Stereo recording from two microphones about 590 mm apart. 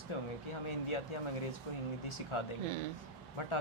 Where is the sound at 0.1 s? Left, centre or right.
Left.